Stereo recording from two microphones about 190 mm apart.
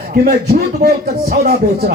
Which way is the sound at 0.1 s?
50° right (ahead or behind).